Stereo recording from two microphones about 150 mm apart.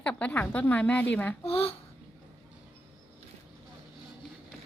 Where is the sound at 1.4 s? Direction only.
40° left (ahead or behind).